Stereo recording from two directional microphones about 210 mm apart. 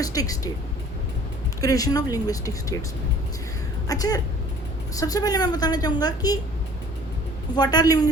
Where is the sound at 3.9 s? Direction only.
15° left (ahead or behind).